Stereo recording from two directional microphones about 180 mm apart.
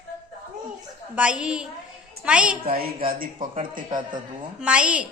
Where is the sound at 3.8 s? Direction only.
25° right (ahead or behind).